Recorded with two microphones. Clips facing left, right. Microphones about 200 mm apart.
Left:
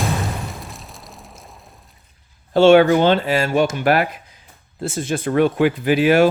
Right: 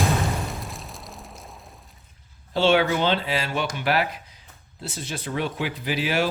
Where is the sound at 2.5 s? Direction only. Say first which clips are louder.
Left 9 dB; 50° left (ahead or behind).